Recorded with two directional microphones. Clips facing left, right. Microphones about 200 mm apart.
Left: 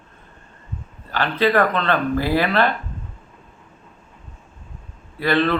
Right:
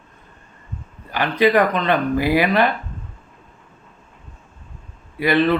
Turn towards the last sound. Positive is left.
turn(degrees=-15)  # may be behind; listen again after turning